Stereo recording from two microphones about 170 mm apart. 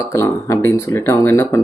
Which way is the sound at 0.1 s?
20° left (ahead or behind).